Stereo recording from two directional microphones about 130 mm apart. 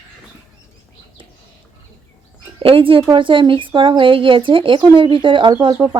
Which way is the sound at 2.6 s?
45° right (ahead or behind).